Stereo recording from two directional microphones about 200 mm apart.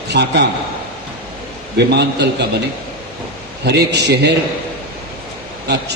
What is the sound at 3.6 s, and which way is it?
Speech, 55° right (ahead or behind).